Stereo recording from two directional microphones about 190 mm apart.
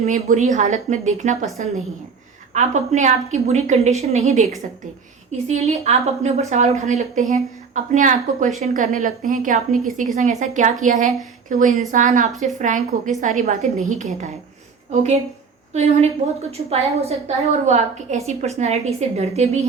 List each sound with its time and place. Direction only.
0.0 s a woman's voice: 40° right (ahead or behind)
2.5 s a woman's voice: 40° right (ahead or behind)
5.5 s a woman's voice: 35° right (ahead or behind)